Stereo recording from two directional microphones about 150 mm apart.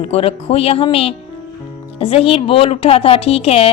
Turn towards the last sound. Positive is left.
turn(degrees=40)  # may be behind; listen again after turning